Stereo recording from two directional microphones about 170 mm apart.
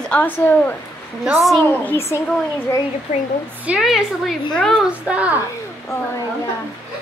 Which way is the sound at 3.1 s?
50° left (ahead or behind).